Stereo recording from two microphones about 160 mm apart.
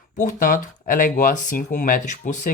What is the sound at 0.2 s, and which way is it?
Speech, 55° left (ahead or behind).